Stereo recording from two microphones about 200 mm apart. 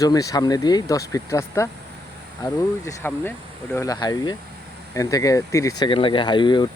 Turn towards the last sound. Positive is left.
turn(degrees=20)  # may be behind; listen again after turning